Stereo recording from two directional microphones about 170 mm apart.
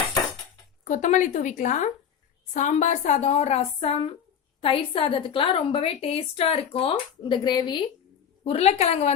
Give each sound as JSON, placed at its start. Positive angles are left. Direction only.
{"t": 0.9, "sound": "a woman's voice", "side_deg": 45}